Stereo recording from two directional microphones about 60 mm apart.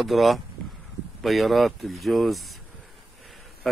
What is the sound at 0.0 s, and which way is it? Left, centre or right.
Speech, centre.